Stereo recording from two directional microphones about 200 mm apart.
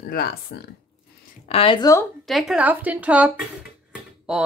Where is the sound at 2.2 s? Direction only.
Centre (ahead or behind).